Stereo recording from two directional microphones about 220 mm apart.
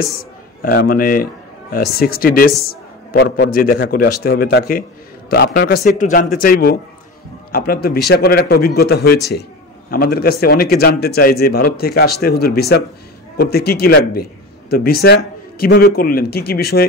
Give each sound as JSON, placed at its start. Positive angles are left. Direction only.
{"t": 0.6, "sound": "speech", "side_deg": 45}